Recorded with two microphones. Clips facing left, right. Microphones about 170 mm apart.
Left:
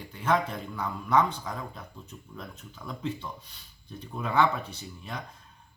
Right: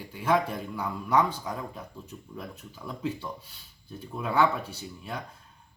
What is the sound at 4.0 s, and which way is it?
Speech, 5° right (ahead or behind).